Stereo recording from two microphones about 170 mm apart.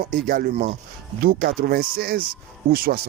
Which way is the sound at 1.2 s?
60° right (ahead or behind).